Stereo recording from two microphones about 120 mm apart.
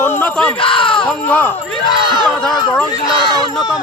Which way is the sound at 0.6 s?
50° left (ahead or behind).